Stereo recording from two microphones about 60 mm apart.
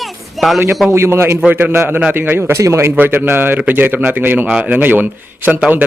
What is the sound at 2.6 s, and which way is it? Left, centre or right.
Speech, right.